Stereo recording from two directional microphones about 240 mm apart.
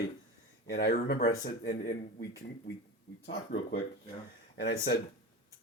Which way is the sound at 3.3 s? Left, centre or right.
Left.